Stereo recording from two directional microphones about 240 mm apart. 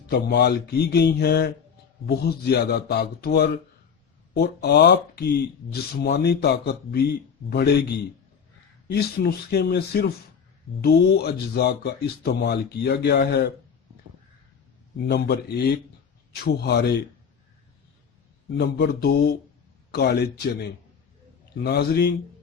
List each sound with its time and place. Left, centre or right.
0.1 s a man's voice: left
15.0 s speech: left
18.5 s speech: left